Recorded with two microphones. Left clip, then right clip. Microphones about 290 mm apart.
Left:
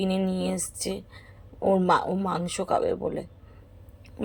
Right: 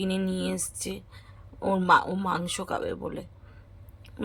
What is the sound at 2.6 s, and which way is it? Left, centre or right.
Speech, right.